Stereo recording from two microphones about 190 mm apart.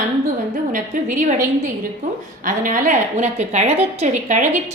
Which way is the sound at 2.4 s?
45° right (ahead or behind).